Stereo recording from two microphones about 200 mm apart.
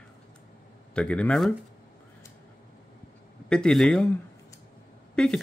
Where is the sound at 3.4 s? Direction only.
5° left (ahead or behind).